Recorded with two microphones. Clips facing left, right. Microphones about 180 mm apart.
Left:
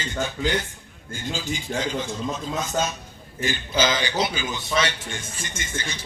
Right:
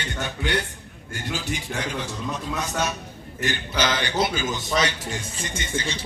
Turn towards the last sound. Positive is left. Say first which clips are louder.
# right 4 dB
turn(degrees=-30)  # may be behind; listen again after turning